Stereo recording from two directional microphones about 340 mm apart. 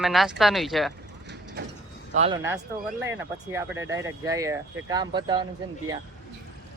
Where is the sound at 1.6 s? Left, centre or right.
Right.